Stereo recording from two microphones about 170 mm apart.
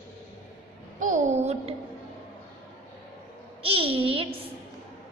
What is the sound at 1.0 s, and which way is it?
Speech, 45° right (ahead or behind).